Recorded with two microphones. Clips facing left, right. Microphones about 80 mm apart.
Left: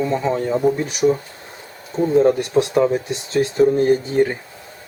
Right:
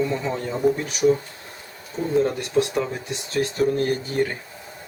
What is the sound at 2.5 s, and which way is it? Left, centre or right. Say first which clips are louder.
Speech: left 6 dB; left.